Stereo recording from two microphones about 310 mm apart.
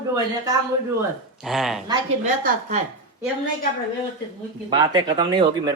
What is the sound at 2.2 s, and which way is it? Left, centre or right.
Speech, right.